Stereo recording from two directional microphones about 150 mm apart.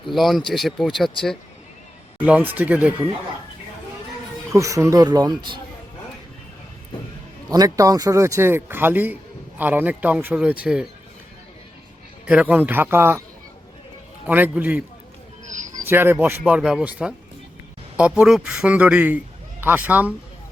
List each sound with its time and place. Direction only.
0.1 s speech: centre (ahead or behind)
2.1 s a man's voice: 10° right (ahead or behind)
4.5 s a man's voice: 20° right (ahead or behind)
7.5 s a man's voice: 25° right (ahead or behind); by 10.8 s 5° right (ahead or behind)
12.2 s a man's voice: 10° right (ahead or behind)
14.3 s a man's voice: 10° right (ahead or behind)